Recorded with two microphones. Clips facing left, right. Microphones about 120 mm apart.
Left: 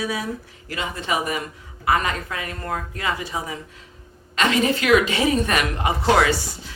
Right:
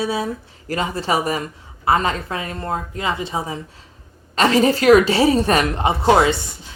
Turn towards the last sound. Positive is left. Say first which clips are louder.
# right 3 dB
turn(degrees=-25)  # may be behind; listen again after turning